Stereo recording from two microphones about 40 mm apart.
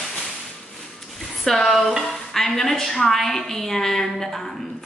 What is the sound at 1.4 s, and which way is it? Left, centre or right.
A woman's voice, centre.